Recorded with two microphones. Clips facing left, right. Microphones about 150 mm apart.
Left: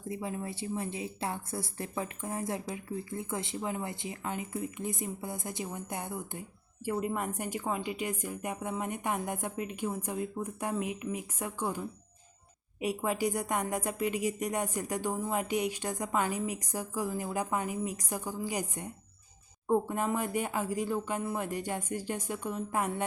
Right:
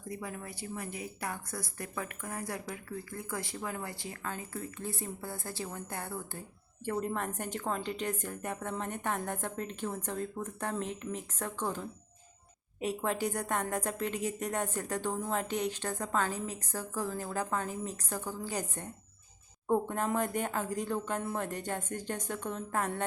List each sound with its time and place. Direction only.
0.1 s a woman's voice: 25° left (ahead or behind)